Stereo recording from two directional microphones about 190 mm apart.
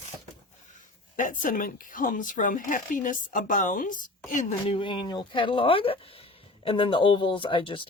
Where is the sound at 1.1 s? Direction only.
45° left (ahead or behind).